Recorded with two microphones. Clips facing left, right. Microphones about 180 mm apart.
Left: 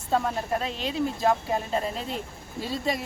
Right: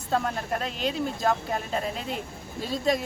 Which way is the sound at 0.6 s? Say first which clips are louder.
Left 1 dB; centre (ahead or behind).